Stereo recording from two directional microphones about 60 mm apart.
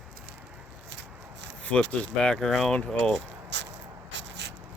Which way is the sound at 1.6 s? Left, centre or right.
Left.